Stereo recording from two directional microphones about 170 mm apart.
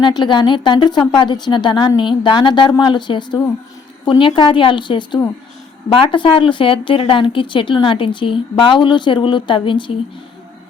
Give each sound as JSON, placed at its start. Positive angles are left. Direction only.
{"t": 0.0, "sound": "speech", "side_deg": 25}